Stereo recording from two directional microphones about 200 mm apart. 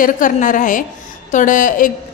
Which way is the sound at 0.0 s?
40° left (ahead or behind).